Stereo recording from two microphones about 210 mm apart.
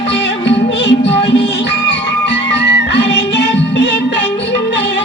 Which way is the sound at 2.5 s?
55° left (ahead or behind).